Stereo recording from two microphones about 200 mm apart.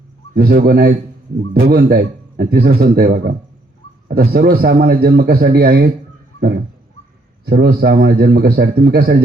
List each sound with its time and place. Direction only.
0.3 s a man's voice: 50° right (ahead or behind)
7.4 s a man's voice: 50° right (ahead or behind)